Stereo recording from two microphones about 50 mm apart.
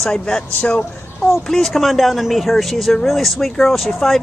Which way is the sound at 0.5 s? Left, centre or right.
Left.